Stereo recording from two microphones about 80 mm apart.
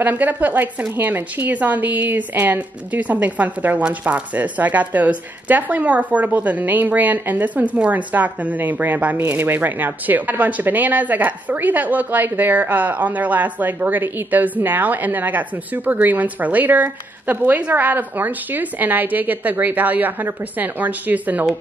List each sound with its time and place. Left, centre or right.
0.0 s a woman's voice: right